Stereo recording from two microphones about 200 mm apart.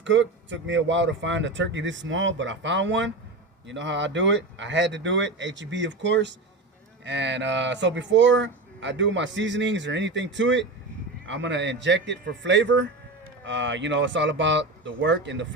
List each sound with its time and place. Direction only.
0.0 s speech: 65° right (ahead or behind)